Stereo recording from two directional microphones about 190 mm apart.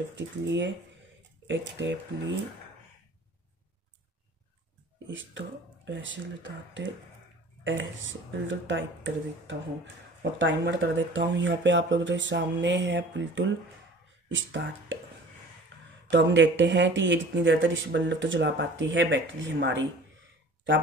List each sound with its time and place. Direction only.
0.1 s speech: 70° right (ahead or behind)
5.9 s speech: 75° right (ahead or behind)
16.1 s speech: 80° right